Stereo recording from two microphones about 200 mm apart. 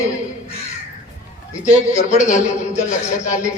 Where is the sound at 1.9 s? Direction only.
35° left (ahead or behind).